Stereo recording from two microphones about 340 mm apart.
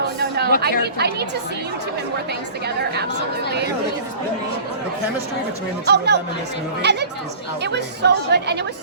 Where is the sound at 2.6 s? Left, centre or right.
Right.